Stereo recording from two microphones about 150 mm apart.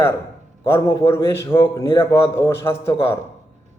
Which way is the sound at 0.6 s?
15° left (ahead or behind).